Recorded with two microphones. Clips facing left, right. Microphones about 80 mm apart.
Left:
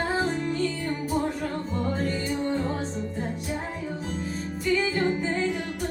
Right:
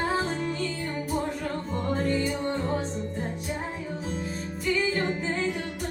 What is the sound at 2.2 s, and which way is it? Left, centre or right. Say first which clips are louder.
Music: left 1 dB; centre.